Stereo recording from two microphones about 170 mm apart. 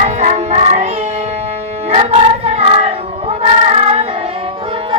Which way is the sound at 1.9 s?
35° right (ahead or behind).